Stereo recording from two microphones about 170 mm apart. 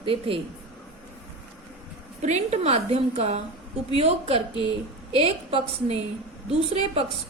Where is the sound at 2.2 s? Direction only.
40° right (ahead or behind).